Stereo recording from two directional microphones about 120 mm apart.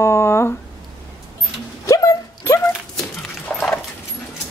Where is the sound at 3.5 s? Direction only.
10° left (ahead or behind).